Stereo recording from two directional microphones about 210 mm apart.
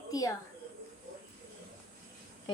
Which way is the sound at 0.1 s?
15° left (ahead or behind).